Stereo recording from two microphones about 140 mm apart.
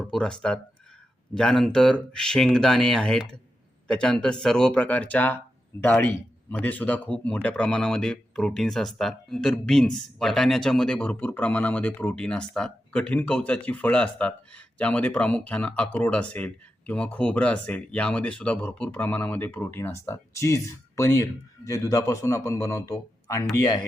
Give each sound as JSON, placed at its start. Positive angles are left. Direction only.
{"t": 0.0, "sound": "speech", "side_deg": 5}